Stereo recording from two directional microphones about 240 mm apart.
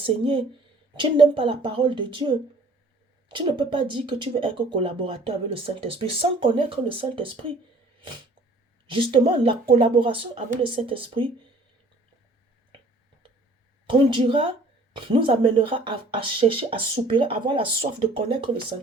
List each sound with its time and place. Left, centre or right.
0.0 s speech: right
8.9 s speech: right
13.8 s speech: right